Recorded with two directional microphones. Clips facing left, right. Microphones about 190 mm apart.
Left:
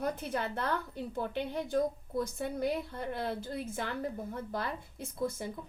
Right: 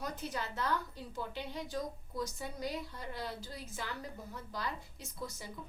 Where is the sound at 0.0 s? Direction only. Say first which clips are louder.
Left 6 dB; 55° left (ahead or behind).